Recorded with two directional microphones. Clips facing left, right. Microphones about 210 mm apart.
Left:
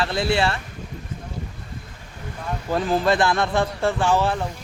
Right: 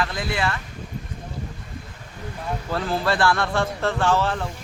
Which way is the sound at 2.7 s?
15° left (ahead or behind).